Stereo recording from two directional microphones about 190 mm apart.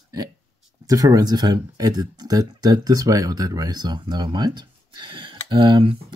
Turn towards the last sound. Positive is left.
turn(degrees=-25)  # may be behind; listen again after turning